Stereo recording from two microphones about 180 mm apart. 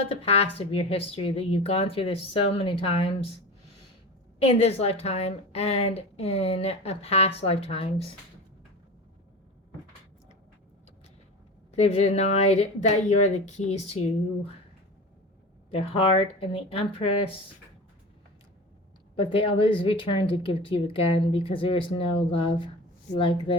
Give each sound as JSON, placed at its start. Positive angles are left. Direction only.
{"t": 0.1, "sound": "a woman's voice", "side_deg": 35}
{"t": 4.4, "sound": "a woman's voice", "side_deg": 35}
{"t": 11.8, "sound": "a woman's voice", "side_deg": 35}
{"t": 15.7, "sound": "a woman's voice", "side_deg": 30}
{"t": 19.1, "sound": "speech", "side_deg": 30}